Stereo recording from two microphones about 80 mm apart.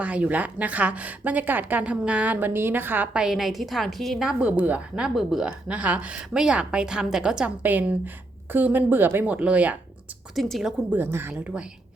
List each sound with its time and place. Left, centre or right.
0.0 s a woman's voice: centre
4.3 s a woman's voice: centre
5.0 s speech: centre
5.5 s a woman's voice: centre
7.6 s a woman's voice: right
10.3 s speech: centre
10.9 s a woman's voice: right